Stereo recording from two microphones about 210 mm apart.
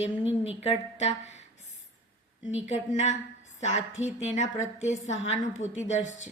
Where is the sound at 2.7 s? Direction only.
35° left (ahead or behind).